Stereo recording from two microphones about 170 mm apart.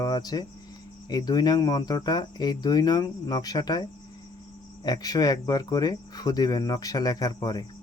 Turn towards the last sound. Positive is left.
turn(degrees=25)  # may be behind; listen again after turning